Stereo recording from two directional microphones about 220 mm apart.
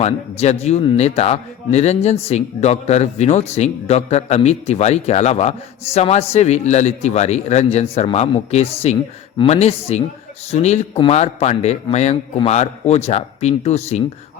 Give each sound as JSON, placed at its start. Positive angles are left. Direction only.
{"t": 0.0, "sound": "speech", "side_deg": 30}